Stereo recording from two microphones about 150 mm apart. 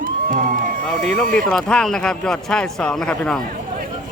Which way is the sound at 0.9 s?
65° right (ahead or behind).